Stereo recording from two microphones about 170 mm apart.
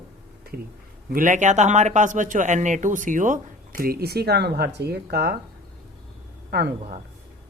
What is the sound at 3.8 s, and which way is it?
A man's voice, 65° right (ahead or behind).